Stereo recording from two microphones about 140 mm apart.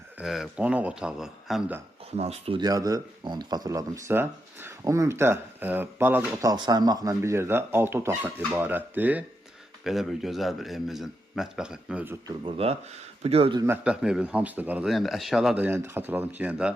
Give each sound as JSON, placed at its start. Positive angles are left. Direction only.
{"t": 0.2, "sound": "a man's voice", "side_deg": -5}
{"t": 2.1, "sound": "speech", "side_deg": -50}
{"t": 2.6, "sound": "speech", "side_deg": -25}
{"t": 6.4, "sound": "speech", "side_deg": -25}
{"t": 9.8, "sound": "a man's voice", "side_deg": 0}
{"t": 12.5, "sound": "speech", "side_deg": -45}
{"t": 13.8, "sound": "speech", "side_deg": -5}
{"t": 14.8, "sound": "a man's voice", "side_deg": 0}
{"t": 15.6, "sound": "speech", "side_deg": -15}